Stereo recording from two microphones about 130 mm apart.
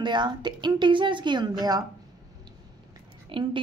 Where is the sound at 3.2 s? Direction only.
40° right (ahead or behind).